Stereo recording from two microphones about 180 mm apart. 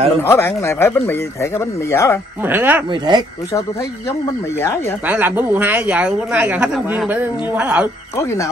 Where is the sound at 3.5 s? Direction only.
20° left (ahead or behind).